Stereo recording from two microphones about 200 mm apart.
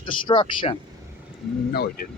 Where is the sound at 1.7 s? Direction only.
50° left (ahead or behind).